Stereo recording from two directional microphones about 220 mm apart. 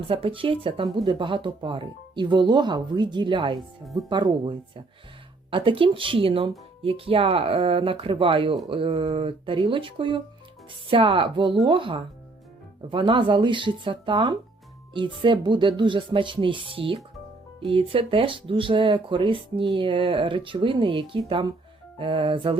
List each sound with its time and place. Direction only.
0.1 s speech: 25° right (ahead or behind)